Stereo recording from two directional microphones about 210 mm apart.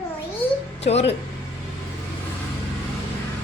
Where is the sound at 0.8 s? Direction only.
30° left (ahead or behind).